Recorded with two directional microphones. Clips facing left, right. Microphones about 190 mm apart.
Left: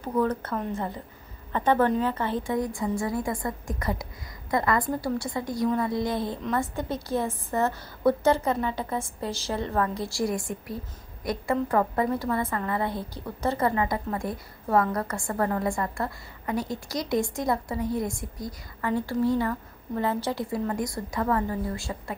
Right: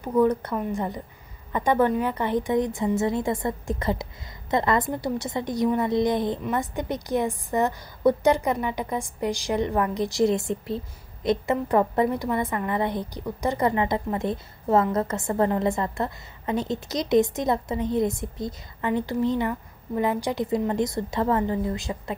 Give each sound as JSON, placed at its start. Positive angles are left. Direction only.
{"t": 0.2, "sound": "a woman's voice", "side_deg": -15}